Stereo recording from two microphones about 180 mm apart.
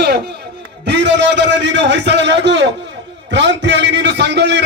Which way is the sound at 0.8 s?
75° right (ahead or behind).